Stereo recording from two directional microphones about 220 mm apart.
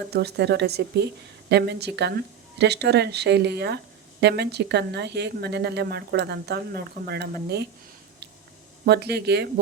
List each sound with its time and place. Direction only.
0.1 s speech: 50° right (ahead or behind)
8.9 s speech: 50° right (ahead or behind)